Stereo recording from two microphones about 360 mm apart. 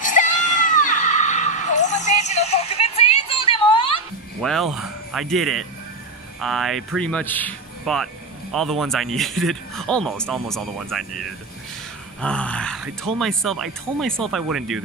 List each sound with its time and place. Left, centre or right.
0.0 s screaming: left
4.4 s speech: centre